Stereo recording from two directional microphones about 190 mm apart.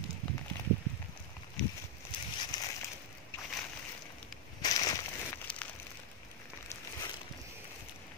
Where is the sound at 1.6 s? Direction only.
5° left (ahead or behind).